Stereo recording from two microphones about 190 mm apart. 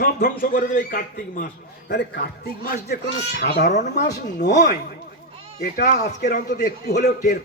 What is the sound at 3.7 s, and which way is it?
Speech, 40° left (ahead or behind).